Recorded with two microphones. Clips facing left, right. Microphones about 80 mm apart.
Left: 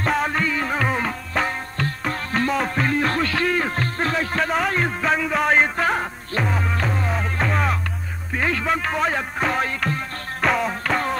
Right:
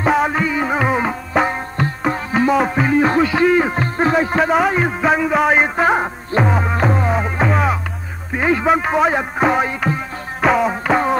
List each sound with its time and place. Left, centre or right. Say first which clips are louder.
0.0 s music: right 5 dB; centre
4.5 s a man's voice: right 6 dB; centre
6.6 s music: right 7 dB; right
7.2 s music: right 5 dB; centre
8.3 s a man's voice: right 7 dB; centre
10.4 s music: right 6 dB; centre